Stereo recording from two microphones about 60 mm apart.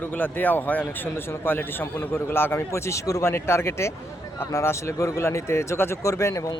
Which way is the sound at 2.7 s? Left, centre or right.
Left.